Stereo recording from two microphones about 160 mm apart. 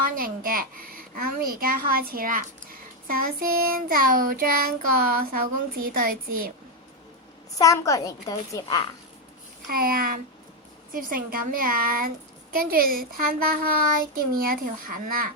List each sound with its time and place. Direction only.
0.0 s a child's voice: 65° right (ahead or behind)
7.6 s a woman's voice: 20° left (ahead or behind)
9.6 s a woman's voice: 65° right (ahead or behind)